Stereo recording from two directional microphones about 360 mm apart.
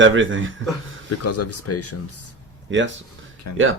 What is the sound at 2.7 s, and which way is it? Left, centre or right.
Speech, right.